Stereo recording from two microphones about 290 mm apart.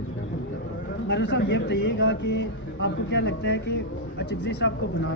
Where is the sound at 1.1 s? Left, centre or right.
Left.